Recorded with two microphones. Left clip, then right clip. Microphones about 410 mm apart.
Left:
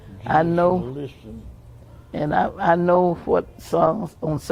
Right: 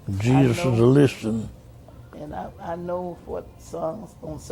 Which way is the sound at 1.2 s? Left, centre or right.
Right.